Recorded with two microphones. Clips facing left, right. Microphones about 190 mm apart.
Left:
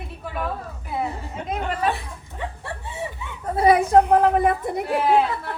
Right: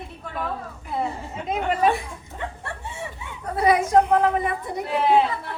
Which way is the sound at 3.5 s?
30° left (ahead or behind).